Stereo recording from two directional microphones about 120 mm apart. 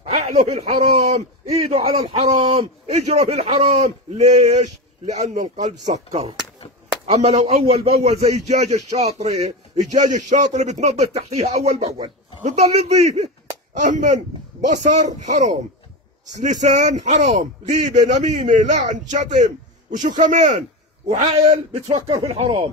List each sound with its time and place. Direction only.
0.1 s a man's voice: 65° right (ahead or behind)
3.1 s a man's voice: 70° right (ahead or behind)
9.8 s a man's voice: 85° right; by 13.3 s 70° right (ahead or behind)
13.7 s a man's voice: 90° right
21.1 s a man's voice: 65° right (ahead or behind)
22.3 s a man's voice: 70° right (ahead or behind)